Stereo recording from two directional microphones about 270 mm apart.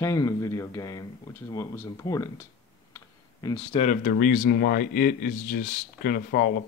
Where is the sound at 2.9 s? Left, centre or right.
Centre.